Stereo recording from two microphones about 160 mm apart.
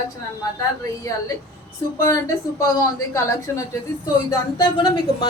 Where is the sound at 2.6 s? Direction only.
20° left (ahead or behind).